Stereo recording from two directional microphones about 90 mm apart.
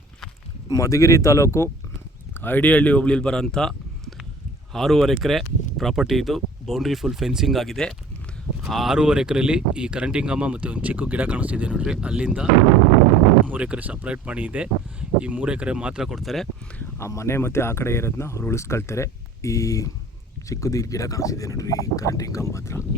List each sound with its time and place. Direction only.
0.8 s speech: 35° left (ahead or behind); by 12.5 s 10° right (ahead or behind)
13.5 s speech: 15° right (ahead or behind); by 16.5 s centre (ahead or behind)
17.1 s speech: 30° left (ahead or behind)